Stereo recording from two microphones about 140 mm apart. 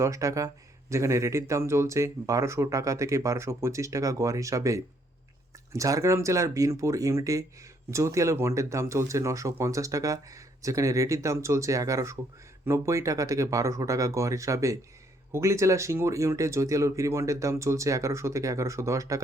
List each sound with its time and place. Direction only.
0.0 s speech: 25° right (ahead or behind)